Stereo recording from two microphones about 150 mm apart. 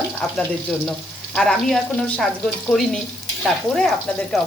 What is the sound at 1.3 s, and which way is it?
Speech, 5° left (ahead or behind).